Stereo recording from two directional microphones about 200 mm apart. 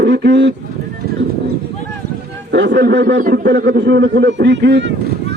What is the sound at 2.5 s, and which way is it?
Speech, 55° right (ahead or behind).